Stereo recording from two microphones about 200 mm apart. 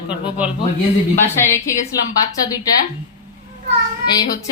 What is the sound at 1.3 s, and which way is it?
Speech, 15° left (ahead or behind).